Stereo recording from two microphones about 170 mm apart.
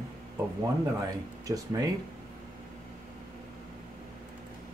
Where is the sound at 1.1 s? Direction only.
20° right (ahead or behind).